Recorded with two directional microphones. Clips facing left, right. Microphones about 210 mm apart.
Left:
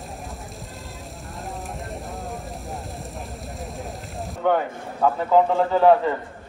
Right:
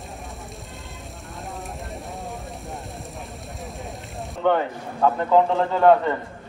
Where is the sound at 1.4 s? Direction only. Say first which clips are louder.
Left 1 dB; centre (ahead or behind).